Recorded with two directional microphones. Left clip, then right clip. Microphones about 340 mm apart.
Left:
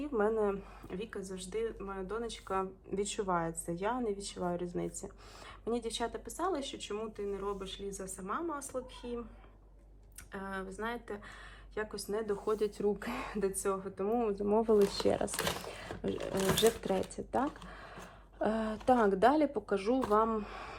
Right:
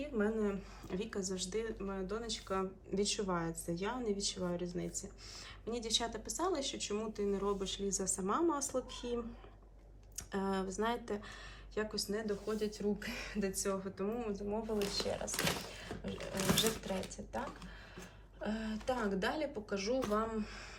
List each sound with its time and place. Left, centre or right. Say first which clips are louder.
0.2 s speech: left 5 dB; centre
10.3 s speech: right 3 dB; centre
18.4 s speech: left 9 dB; centre